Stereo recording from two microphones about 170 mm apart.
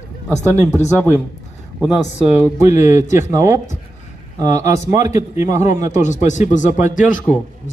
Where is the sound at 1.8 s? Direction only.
10° right (ahead or behind).